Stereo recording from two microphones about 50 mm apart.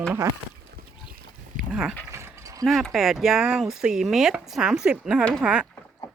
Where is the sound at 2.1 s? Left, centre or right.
Right.